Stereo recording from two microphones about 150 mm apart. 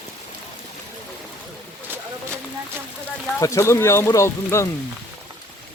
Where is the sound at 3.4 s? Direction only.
20° left (ahead or behind).